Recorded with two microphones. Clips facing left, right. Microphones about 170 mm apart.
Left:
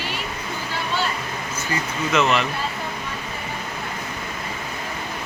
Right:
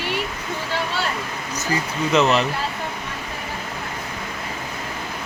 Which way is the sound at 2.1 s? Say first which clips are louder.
Right 2 dB; 35° right (ahead or behind).